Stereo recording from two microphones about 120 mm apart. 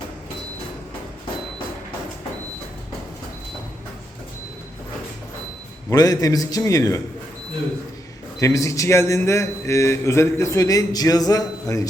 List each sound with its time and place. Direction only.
5.9 s a man's voice: 30° left (ahead or behind)
8.4 s a man's voice: 25° left (ahead or behind)